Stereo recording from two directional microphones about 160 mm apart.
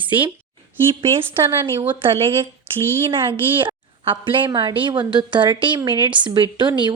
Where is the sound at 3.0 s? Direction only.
30° right (ahead or behind).